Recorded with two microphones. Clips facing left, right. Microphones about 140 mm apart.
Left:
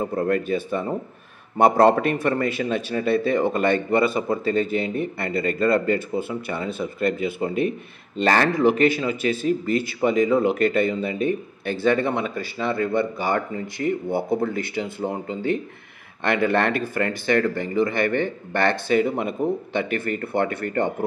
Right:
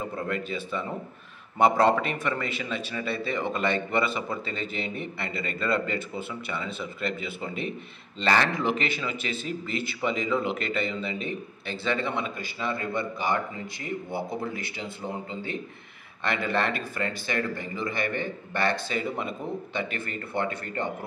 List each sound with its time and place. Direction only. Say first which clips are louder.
0.0 s a man's voice: left 9 dB; 40° left (ahead or behind)